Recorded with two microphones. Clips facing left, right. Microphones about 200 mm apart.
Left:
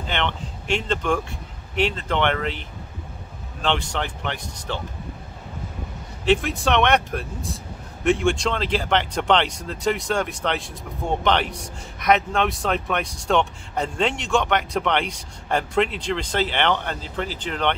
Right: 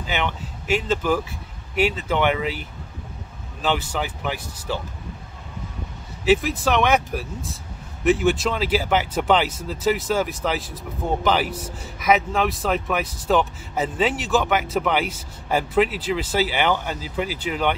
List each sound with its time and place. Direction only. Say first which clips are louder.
0.0 s speech: even; 5° right (ahead or behind)
3.6 s speech: right 1 dB; 5° right (ahead or behind)
6.2 s speech: right 1 dB; 5° right (ahead or behind)